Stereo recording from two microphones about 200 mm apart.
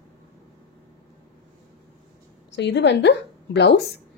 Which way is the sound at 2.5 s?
60° left (ahead or behind).